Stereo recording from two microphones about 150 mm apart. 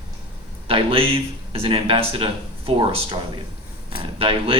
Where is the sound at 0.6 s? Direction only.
40° right (ahead or behind).